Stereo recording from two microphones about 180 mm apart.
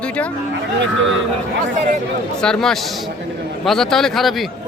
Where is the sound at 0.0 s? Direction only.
5° left (ahead or behind).